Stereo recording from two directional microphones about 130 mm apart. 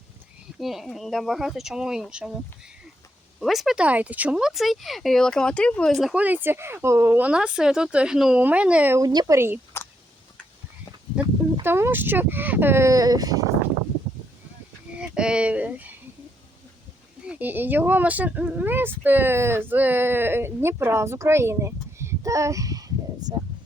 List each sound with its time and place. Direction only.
0.6 s speech: centre (ahead or behind)
3.4 s speech: centre (ahead or behind)
6.1 s speech: 15° right (ahead or behind)
9.0 s speech: 25° right (ahead or behind)
11.6 s speech: 15° right (ahead or behind)
14.9 s speech: 5° right (ahead or behind)
17.2 s speech: 10° right (ahead or behind)